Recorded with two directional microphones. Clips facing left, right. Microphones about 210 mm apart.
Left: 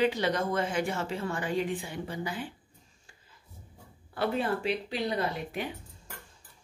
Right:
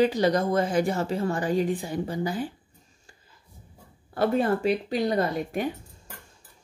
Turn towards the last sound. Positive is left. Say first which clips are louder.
# right 6 dB
turn(degrees=-45)  # may be behind; listen again after turning